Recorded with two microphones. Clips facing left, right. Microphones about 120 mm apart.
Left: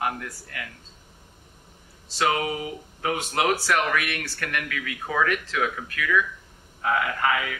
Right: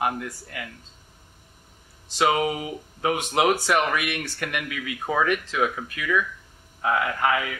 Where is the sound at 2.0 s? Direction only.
15° right (ahead or behind).